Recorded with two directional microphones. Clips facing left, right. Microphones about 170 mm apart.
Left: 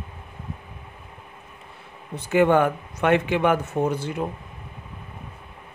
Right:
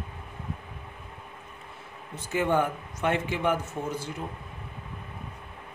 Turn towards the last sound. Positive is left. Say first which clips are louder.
# left 9 dB
turn(degrees=65)  # may be behind; listen again after turning